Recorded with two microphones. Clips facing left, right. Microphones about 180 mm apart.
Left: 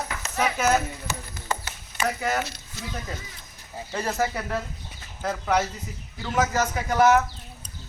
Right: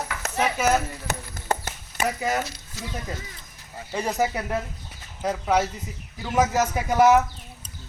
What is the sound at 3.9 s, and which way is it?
Speech, 15° right (ahead or behind).